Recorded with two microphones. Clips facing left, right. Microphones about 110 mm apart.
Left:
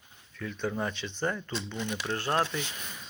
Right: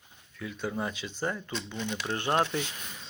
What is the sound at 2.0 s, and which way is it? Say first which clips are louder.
Speech: right 2 dB; 20° right (ahead or behind).